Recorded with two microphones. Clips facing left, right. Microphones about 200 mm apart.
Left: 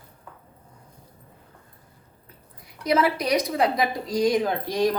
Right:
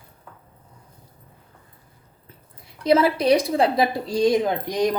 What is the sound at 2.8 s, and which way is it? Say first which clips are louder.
A woman's voice: right 4 dB; 30° right (ahead or behind).